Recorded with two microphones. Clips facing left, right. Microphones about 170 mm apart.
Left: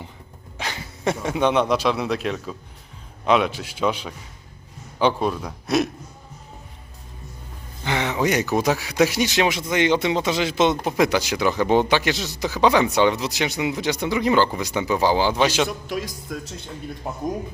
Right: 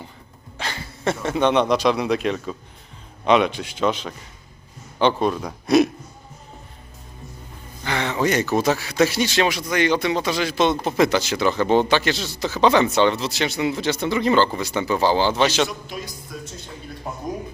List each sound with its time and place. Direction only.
0.6 s a man's voice: 15° left (ahead or behind)
7.9 s speech: 15° left (ahead or behind)
15.9 s a man's voice: 90° left